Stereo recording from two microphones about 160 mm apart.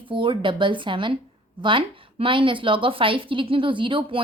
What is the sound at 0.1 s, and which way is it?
A woman's voice, 30° right (ahead or behind).